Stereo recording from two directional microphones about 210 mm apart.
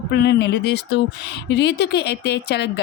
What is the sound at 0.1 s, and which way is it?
A woman's voice, 50° left (ahead or behind).